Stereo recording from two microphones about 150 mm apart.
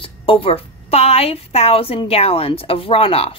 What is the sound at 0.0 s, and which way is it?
A woman's voice, 35° left (ahead or behind).